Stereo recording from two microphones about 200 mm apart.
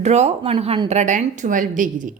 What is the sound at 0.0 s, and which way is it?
A woman's voice, 35° right (ahead or behind).